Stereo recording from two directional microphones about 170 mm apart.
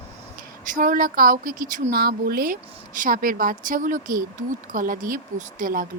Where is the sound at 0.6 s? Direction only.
50° right (ahead or behind).